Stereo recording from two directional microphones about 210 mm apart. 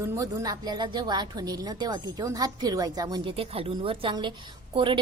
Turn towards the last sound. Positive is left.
turn(degrees=-25)  # may be behind; listen again after turning